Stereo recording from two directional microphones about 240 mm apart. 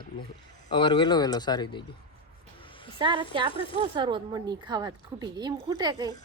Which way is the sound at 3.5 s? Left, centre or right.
Left.